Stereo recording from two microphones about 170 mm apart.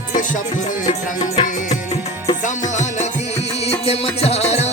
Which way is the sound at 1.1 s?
25° left (ahead or behind).